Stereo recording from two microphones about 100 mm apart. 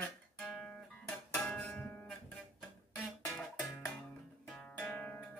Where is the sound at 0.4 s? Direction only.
10° left (ahead or behind).